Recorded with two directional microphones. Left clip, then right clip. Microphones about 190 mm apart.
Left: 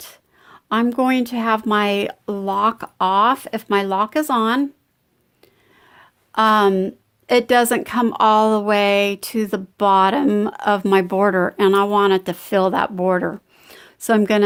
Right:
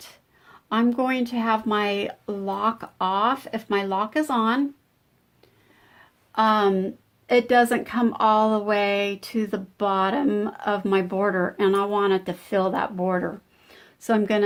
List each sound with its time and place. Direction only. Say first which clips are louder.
0.0 s a woman's voice: left 5 dB; 55° left (ahead or behind)
6.3 s a woman's voice: left 5 dB; 55° left (ahead or behind)